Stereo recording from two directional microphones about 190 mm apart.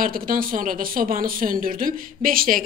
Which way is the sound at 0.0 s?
45° right (ahead or behind).